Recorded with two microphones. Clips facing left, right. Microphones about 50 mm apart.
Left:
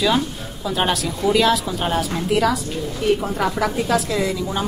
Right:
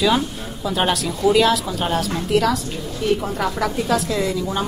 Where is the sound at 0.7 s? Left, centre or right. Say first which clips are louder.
Right 1 dB; centre.